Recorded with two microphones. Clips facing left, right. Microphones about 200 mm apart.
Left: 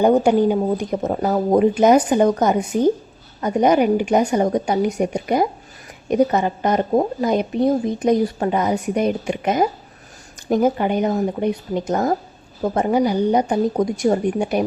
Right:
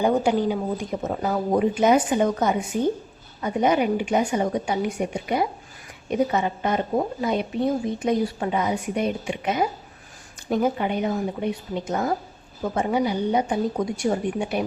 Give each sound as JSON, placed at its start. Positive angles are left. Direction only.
{"t": 0.2, "sound": "a woman's voice", "side_deg": 55}
{"t": 1.0, "sound": "a woman's voice", "side_deg": 40}